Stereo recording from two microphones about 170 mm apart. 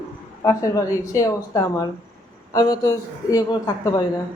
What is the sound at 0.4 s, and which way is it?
Speech, 20° left (ahead or behind).